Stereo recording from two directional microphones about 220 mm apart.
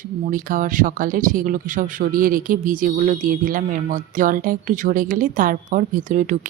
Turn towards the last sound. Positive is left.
turn(degrees=-35)  # may be behind; listen again after turning